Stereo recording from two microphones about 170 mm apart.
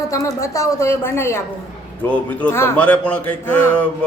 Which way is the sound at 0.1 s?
20° left (ahead or behind).